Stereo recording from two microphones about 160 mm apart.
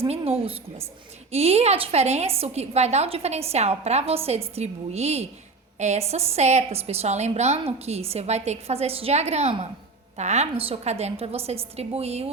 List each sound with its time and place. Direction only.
0.1 s a woman's voice: 40° right (ahead or behind)